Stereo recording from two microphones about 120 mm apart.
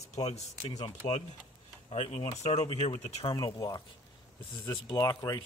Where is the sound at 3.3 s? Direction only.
35° left (ahead or behind).